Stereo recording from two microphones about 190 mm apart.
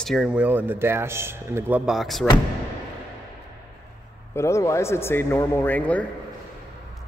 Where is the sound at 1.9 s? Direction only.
Centre (ahead or behind).